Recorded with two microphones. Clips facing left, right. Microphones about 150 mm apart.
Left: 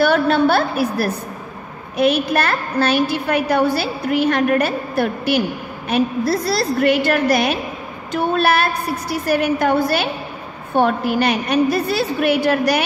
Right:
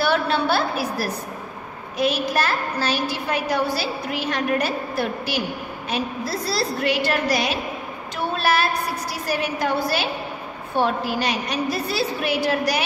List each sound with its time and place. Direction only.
0.0 s a woman's voice: 50° left (ahead or behind)